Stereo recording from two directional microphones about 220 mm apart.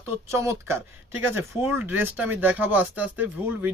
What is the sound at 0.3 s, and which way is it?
Speech, 10° right (ahead or behind).